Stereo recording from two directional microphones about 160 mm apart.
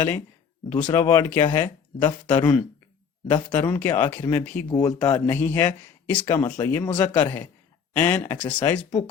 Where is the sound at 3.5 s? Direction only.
15° left (ahead or behind).